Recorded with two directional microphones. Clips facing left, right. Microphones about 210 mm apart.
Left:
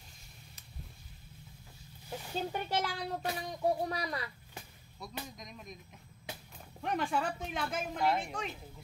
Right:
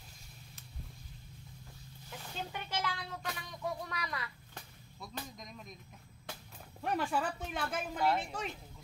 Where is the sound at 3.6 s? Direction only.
35° left (ahead or behind).